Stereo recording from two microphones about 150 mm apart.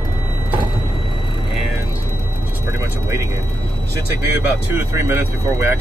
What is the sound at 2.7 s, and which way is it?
Speech, 15° right (ahead or behind).